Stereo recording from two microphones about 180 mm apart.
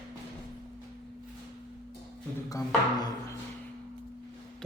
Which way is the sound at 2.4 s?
20° left (ahead or behind).